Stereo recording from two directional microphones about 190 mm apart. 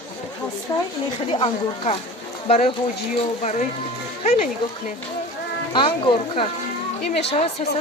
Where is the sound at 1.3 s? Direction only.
30° left (ahead or behind).